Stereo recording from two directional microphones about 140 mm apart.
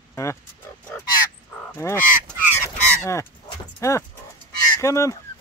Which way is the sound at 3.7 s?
20° left (ahead or behind).